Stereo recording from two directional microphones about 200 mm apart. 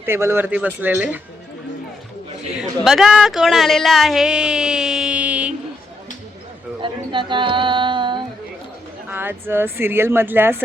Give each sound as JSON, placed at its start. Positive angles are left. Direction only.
{"t": 0.0, "sound": "speech", "side_deg": -10}
{"t": 2.6, "sound": "speech", "side_deg": 0}
{"t": 6.8, "sound": "a sound", "side_deg": -25}
{"t": 9.0, "sound": "speech", "side_deg": -10}